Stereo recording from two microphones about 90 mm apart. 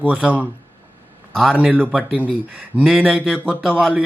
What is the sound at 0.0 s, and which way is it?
Speech, 15° right (ahead or behind).